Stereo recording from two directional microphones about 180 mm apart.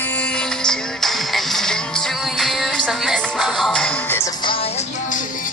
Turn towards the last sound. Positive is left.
turn(degrees=30)  # may be behind; listen again after turning